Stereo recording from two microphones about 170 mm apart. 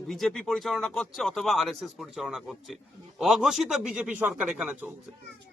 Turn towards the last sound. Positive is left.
turn(degrees=-5)  # may be behind; listen again after turning